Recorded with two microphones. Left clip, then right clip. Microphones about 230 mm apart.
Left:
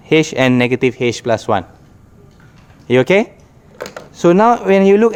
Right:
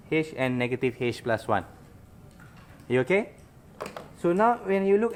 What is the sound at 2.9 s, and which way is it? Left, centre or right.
Speech, left.